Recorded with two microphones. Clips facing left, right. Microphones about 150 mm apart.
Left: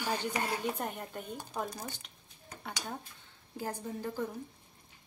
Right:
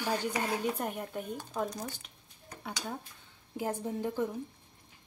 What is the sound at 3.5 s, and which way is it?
Speech, 15° right (ahead or behind).